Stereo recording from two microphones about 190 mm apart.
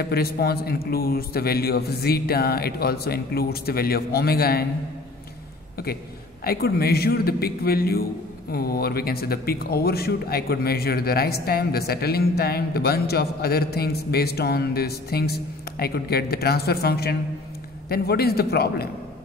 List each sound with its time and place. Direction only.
0.0 s speech: 55° left (ahead or behind)
6.4 s a man's voice: 55° left (ahead or behind)